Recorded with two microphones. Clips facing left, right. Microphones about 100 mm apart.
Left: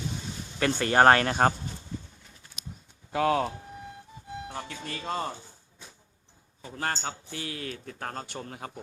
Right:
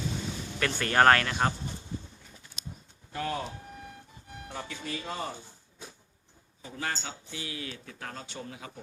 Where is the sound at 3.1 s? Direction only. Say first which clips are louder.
Left 8 dB; 90° left.